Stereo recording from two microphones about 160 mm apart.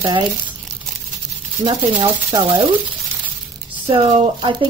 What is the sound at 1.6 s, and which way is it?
Speech, 30° right (ahead or behind).